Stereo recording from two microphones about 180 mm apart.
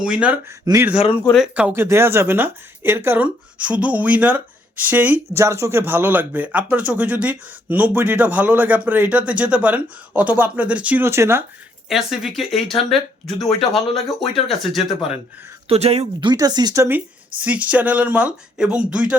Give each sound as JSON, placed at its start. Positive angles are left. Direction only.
{"t": 0.0, "sound": "speech", "side_deg": -5}
{"t": 0.6, "sound": "speech", "side_deg": -15}
{"t": 0.9, "sound": "a man's voice", "side_deg": 30}
{"t": 1.3, "sound": "speech", "side_deg": -5}
{"t": 11.9, "sound": "speech", "side_deg": 0}
{"t": 15.7, "sound": "speech", "side_deg": -35}